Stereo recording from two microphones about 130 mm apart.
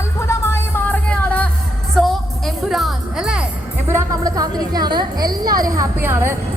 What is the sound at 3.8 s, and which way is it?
Music, 25° right (ahead or behind).